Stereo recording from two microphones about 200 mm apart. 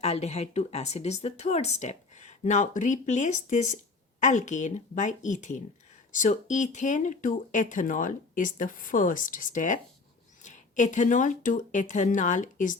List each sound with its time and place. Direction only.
0.0 s speech: 30° left (ahead or behind)